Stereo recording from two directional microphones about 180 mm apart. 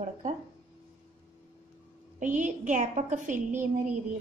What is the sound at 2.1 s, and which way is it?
A woman's voice, 45° right (ahead or behind).